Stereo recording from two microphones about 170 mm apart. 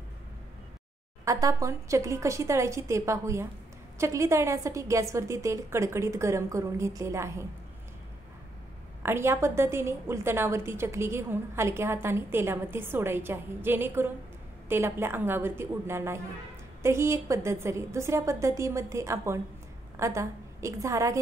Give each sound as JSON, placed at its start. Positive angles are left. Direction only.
{"t": 1.2, "sound": "a woman's voice", "side_deg": -20}
{"t": 9.0, "sound": "a woman's voice", "side_deg": -15}